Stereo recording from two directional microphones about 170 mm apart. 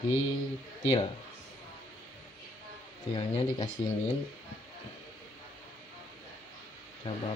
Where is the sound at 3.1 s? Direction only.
30° left (ahead or behind).